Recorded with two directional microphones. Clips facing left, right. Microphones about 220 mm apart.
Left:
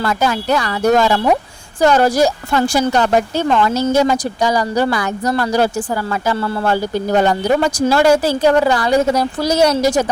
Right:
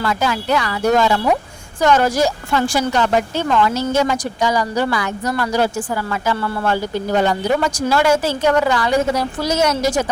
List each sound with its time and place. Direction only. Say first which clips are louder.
0.0 s speech: left 2 dB; 40° left (ahead or behind)